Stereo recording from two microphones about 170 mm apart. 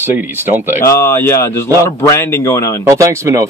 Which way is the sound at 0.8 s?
15° left (ahead or behind).